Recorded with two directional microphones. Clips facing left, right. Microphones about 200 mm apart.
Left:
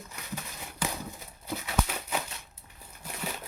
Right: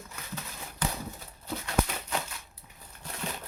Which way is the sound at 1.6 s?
5° left (ahead or behind).